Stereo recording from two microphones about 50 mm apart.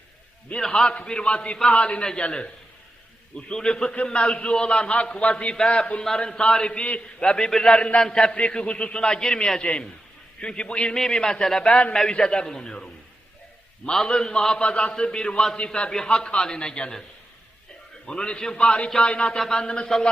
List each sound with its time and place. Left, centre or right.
0.6 s a man's voice: centre
18.0 s a man's voice: centre